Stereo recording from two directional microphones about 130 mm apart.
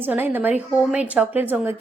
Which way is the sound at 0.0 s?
15° right (ahead or behind).